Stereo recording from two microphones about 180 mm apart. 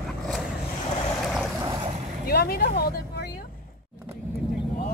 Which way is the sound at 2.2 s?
60° left (ahead or behind).